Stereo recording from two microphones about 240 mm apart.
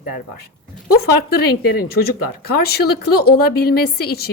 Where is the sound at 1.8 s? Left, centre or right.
Left.